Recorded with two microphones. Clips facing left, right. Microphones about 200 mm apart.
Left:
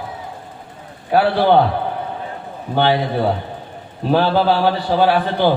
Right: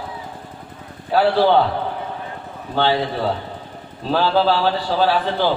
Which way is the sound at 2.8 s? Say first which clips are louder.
Left 3 dB; 15° left (ahead or behind).